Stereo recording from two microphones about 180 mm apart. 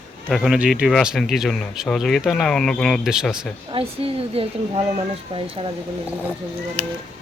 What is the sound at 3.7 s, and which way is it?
Speech, 30° right (ahead or behind).